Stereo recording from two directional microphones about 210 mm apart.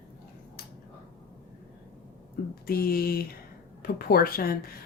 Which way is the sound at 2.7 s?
45° left (ahead or behind).